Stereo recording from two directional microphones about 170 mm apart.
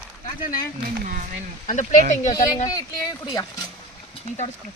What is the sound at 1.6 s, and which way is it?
Speech, 45° left (ahead or behind).